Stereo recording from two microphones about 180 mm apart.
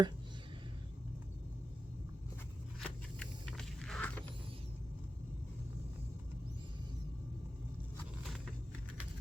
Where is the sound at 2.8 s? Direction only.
5° left (ahead or behind).